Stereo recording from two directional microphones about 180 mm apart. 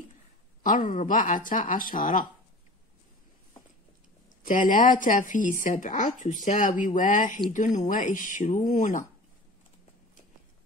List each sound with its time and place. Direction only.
0.7 s speech: 45° left (ahead or behind)
4.4 s speech: 45° left (ahead or behind)